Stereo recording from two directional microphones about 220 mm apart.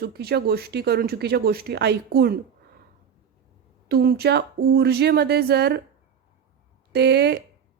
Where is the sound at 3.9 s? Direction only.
45° right (ahead or behind).